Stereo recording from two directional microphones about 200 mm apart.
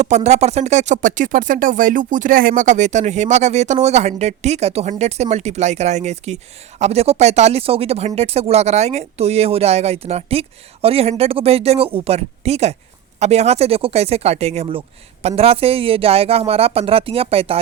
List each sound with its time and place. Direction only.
0.0 s speech: 35° right (ahead or behind)